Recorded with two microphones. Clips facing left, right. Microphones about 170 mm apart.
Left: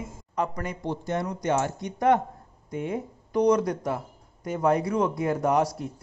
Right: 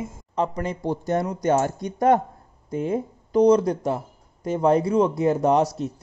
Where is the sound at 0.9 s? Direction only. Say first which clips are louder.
Right 5 dB; 40° right (ahead or behind).